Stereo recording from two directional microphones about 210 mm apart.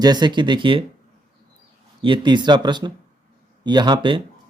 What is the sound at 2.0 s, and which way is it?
Speech, 20° right (ahead or behind).